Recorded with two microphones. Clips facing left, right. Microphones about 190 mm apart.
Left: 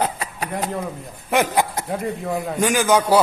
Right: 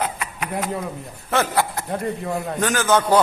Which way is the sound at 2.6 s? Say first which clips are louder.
Left 2 dB; 10° left (ahead or behind).